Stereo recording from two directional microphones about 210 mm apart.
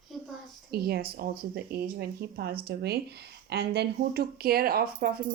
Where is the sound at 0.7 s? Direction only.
50° right (ahead or behind).